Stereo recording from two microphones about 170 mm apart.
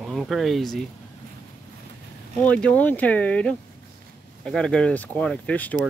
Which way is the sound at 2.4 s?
5° left (ahead or behind).